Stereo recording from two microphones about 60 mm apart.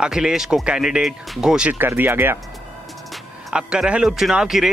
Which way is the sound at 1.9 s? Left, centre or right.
Right.